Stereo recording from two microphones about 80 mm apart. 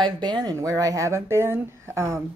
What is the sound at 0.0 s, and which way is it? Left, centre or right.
Speech, right.